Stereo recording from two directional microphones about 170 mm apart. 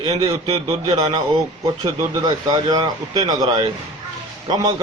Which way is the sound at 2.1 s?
25° right (ahead or behind).